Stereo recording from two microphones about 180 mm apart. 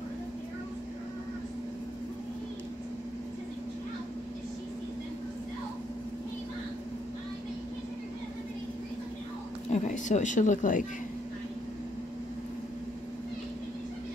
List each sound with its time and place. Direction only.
9.7 s speech: 40° left (ahead or behind)